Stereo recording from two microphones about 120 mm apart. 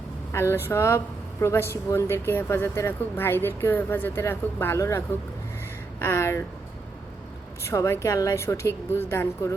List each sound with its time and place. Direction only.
0.3 s a woman's voice: 20° left (ahead or behind)
7.6 s a woman's voice: 25° left (ahead or behind)